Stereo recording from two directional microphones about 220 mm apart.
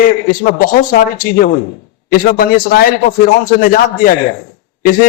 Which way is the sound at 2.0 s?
40° left (ahead or behind).